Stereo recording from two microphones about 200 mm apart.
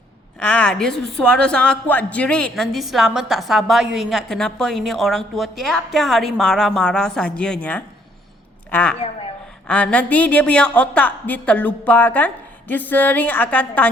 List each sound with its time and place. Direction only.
0.3 s a man's voice: 5° left (ahead or behind)